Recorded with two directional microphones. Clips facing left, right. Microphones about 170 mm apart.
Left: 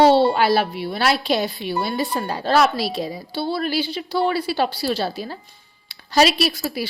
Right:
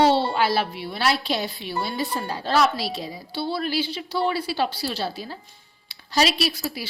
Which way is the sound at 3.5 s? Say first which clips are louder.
Left 3 dB; 55° left (ahead or behind).